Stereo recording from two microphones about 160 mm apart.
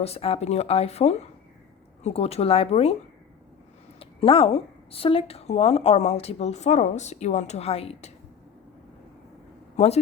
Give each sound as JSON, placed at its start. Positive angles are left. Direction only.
{"t": 0.0, "sound": "a woman's voice", "side_deg": 40}
{"t": 4.0, "sound": "a woman's voice", "side_deg": 35}
{"t": 9.7, "sound": "a man's voice", "side_deg": 40}